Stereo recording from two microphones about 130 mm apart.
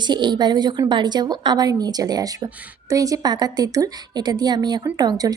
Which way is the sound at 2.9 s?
25° right (ahead or behind).